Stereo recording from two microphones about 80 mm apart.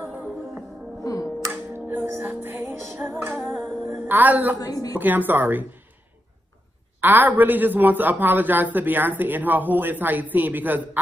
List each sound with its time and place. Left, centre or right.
0.0 s music: centre
1.0 s music: left
1.5 s music: right
4.1 s speech: right
4.6 s a woman's voice: left
4.9 s speech: right
7.0 s speech: right